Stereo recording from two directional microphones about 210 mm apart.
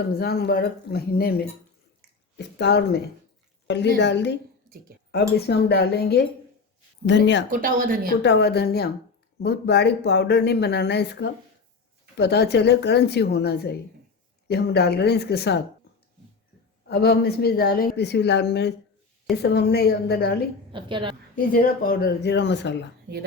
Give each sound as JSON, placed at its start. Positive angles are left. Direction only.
{"t": 0.1, "sound": "a woman's voice", "side_deg": 50}
{"t": 5.5, "sound": "a woman's voice", "side_deg": 50}
{"t": 7.5, "sound": "speech", "side_deg": -40}
{"t": 8.2, "sound": "speech", "side_deg": 55}
{"t": 16.9, "sound": "speech", "side_deg": 50}
{"t": 20.7, "sound": "a woman's voice", "side_deg": -25}
{"t": 21.5, "sound": "speech", "side_deg": 45}